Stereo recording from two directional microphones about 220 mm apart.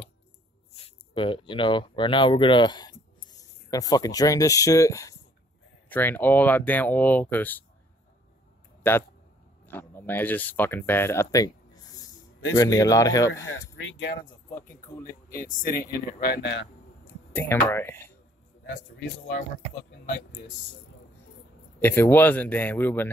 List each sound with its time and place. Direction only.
0.7 s speech: 25° left (ahead or behind); by 7.6 s 10° left (ahead or behind)
9.7 s speech: 10° left (ahead or behind)
13.5 s speech: 60° left (ahead or behind)
14.6 s speech: 10° left (ahead or behind)
15.3 s speech: 40° left (ahead or behind)
17.0 s speech: 10° left (ahead or behind)
21.7 s speech: 10° left (ahead or behind)